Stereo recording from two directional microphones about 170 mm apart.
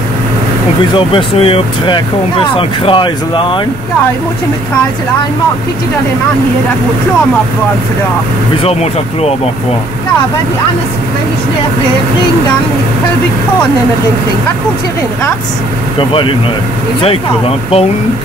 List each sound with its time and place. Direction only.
0.9 s speech: 30° left (ahead or behind)
16.0 s speech: 30° left (ahead or behind)